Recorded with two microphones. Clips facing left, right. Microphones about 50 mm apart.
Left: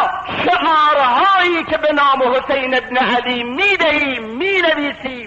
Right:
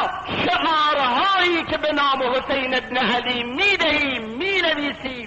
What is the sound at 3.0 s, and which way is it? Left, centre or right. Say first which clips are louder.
A man's voice: left 4 dB; left.